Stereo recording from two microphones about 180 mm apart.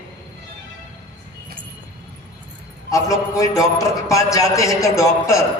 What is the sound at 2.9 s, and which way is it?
A man's voice, 20° left (ahead or behind).